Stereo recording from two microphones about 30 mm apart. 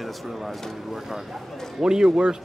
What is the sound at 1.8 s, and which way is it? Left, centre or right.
Speech, right.